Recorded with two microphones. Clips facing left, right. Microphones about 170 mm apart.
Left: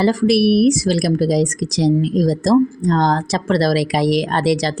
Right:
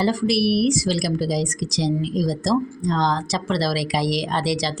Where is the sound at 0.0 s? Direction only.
55° left (ahead or behind).